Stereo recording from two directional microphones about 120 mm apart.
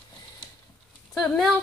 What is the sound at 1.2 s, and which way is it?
Speech, 5° left (ahead or behind).